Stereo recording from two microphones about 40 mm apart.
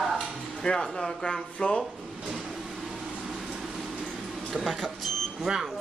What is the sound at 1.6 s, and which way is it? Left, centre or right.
Speech, left.